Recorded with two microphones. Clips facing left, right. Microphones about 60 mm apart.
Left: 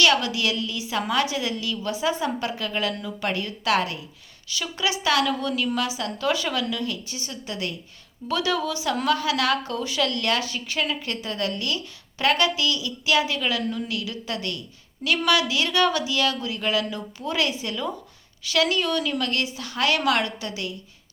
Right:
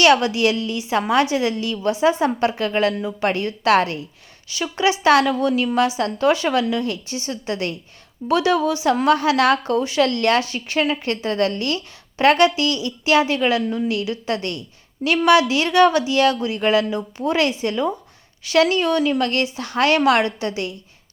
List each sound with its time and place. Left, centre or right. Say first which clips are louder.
0.0 s a woman's voice: right 6 dB; right
4.4 s a woman's voice: right 7 dB; right
8.3 s a woman's voice: right 7 dB; right